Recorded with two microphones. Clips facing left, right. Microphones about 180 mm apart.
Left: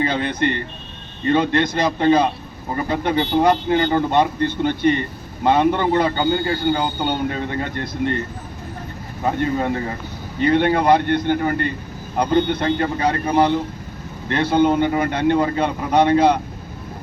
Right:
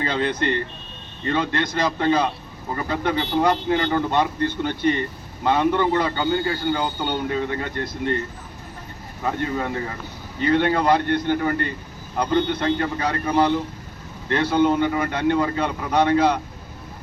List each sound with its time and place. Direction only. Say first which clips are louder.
0.0 s speech: left 3 dB; 20° left (ahead or behind)
9.2 s speech: left 4 dB; 20° left (ahead or behind)